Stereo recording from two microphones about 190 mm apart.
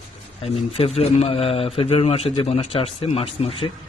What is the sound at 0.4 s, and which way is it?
A man's voice, 30° left (ahead or behind).